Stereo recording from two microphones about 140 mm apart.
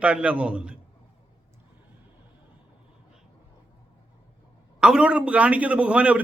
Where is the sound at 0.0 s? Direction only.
10° right (ahead or behind).